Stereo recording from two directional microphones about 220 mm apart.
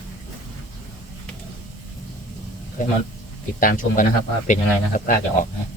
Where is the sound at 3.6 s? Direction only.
40° left (ahead or behind).